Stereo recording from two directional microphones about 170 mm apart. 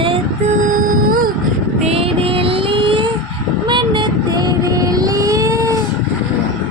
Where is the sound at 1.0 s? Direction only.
55° right (ahead or behind).